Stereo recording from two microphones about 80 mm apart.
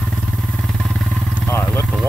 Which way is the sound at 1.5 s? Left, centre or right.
Left.